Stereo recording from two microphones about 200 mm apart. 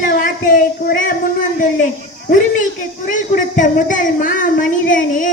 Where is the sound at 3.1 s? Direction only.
40° left (ahead or behind).